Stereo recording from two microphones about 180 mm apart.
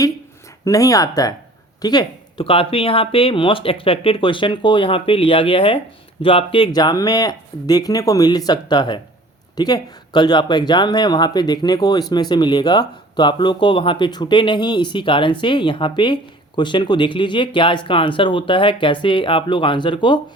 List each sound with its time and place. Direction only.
0.6 s speech: 20° left (ahead or behind)